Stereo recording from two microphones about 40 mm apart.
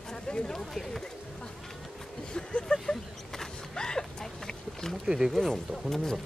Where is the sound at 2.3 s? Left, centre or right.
Centre.